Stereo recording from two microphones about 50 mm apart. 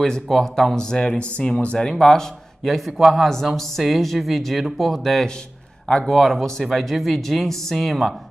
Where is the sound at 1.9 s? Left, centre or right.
Centre.